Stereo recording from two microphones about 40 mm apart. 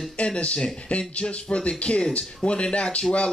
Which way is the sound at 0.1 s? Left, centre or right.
Left.